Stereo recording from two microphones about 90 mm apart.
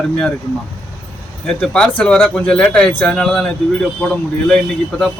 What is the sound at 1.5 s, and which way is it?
Speech, 5° left (ahead or behind).